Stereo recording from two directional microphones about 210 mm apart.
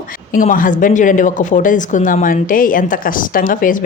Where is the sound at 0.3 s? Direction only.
40° left (ahead or behind).